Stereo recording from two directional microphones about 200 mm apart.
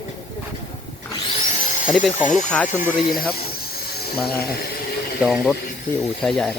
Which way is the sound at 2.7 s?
40° left (ahead or behind).